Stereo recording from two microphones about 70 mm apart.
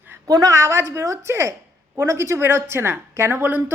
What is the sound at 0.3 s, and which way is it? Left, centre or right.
A woman's voice, right.